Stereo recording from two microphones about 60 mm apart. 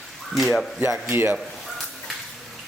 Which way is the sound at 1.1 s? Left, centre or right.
Right.